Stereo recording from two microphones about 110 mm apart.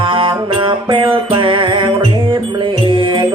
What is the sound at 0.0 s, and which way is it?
Music, 50° right (ahead or behind).